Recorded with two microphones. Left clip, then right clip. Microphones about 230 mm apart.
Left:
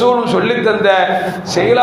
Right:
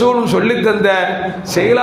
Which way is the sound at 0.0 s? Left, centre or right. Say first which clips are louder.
Left 1 dB; right.